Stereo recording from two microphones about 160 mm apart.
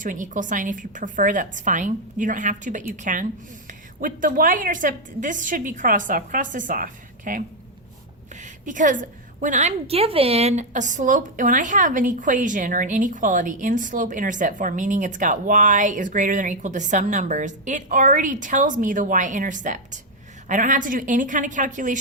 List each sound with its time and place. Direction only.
0.0 s a woman's voice: 55° right (ahead or behind)